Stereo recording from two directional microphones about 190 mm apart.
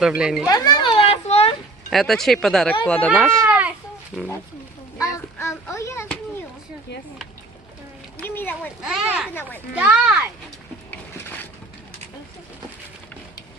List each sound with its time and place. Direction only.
0.0 s speech: 5° right (ahead or behind)
0.4 s children playing: 20° left (ahead or behind)
1.9 s speech: centre (ahead or behind)
3.4 s babbling: 5° right (ahead or behind)
4.9 s a sound: 15° left (ahead or behind)
8.2 s a sound: 10° left (ahead or behind)
8.8 s speech: centre (ahead or behind)